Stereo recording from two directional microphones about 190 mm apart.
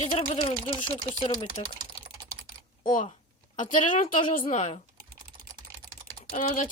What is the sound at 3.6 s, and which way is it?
Speech, 40° left (ahead or behind).